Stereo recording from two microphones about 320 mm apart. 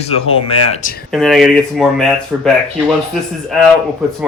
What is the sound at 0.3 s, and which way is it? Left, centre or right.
Speech, centre.